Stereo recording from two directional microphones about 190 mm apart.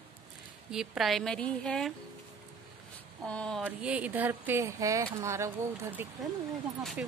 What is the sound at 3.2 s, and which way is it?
Speech, 5° left (ahead or behind).